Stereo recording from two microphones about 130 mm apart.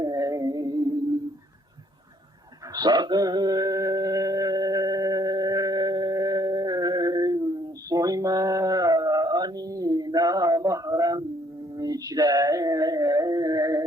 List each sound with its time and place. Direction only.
0.0 s music: 25° right (ahead or behind)
2.7 s music: 30° right (ahead or behind)